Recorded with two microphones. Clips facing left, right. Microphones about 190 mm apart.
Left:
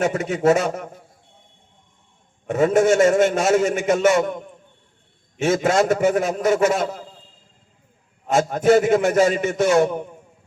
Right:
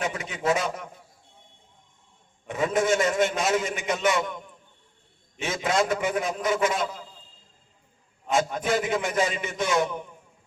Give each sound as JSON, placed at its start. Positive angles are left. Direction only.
{"t": 0.0, "sound": "a man's voice", "side_deg": 50}
{"t": 2.5, "sound": "a man's voice", "side_deg": 50}
{"t": 8.3, "sound": "a man's voice", "side_deg": 50}